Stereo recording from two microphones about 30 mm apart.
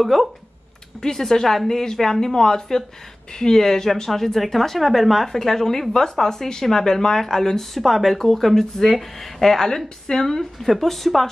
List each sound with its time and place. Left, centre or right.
0.0 s speech: centre
1.0 s speech: centre
7.7 s speech: centre